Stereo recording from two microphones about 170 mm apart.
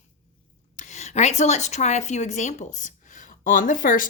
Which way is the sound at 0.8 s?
45° left (ahead or behind).